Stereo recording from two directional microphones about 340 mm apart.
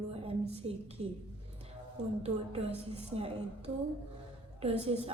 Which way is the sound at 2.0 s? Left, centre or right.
Centre.